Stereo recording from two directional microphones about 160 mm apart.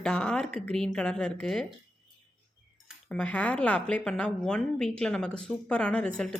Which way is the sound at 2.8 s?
5° left (ahead or behind).